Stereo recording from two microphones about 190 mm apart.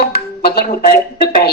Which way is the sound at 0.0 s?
55° left (ahead or behind).